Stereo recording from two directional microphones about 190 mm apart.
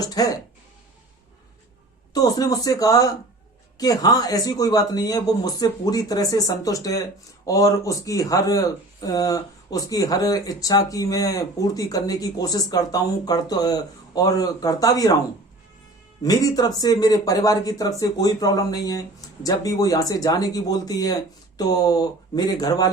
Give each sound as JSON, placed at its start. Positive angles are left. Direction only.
{"t": 0.0, "sound": "speech", "side_deg": 20}
{"t": 2.1, "sound": "speech", "side_deg": 20}
{"t": 16.2, "sound": "speech", "side_deg": 20}